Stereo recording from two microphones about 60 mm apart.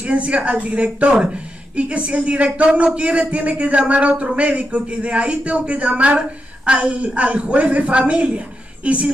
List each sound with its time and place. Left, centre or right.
0.0 s speech: right